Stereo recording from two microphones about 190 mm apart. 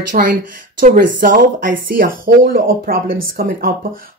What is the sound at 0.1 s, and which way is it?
Speech, 45° right (ahead or behind).